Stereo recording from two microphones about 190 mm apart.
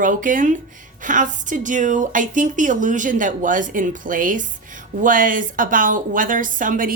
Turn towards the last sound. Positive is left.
turn(degrees=-45)  # may be behind; listen again after turning